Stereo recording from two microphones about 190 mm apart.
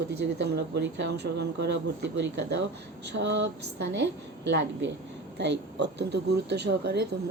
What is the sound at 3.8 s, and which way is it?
Speech, 60° right (ahead or behind).